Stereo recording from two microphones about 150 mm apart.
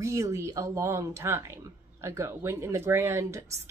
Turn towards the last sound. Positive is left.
turn(degrees=-20)  # may be behind; listen again after turning